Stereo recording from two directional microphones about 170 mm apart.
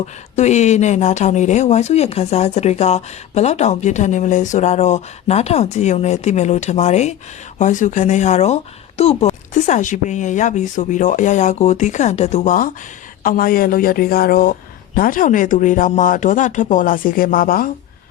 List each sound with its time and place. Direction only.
0.0 s speech: 40° left (ahead or behind)